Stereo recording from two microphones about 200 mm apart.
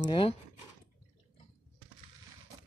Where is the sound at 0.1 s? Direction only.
25° left (ahead or behind).